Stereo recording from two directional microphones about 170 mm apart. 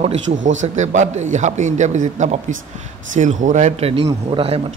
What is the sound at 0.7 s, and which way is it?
A man's voice, 45° right (ahead or behind).